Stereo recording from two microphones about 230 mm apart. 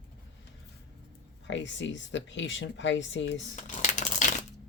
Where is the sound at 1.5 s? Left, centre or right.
Left.